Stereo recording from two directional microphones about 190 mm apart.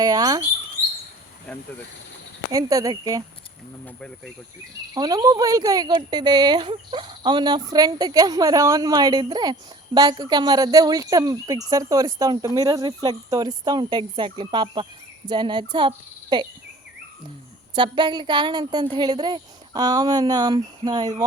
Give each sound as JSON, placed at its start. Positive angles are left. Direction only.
{"t": 0.0, "sound": "speech", "side_deg": -20}
{"t": 1.5, "sound": "speech", "side_deg": 5}
{"t": 2.5, "sound": "speech", "side_deg": -20}
{"t": 3.8, "sound": "speech", "side_deg": 5}
{"t": 4.9, "sound": "speech", "side_deg": -20}
{"t": 17.7, "sound": "speech", "side_deg": -25}